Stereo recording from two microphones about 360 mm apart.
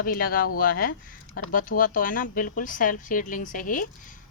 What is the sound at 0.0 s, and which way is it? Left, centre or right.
Speech, left.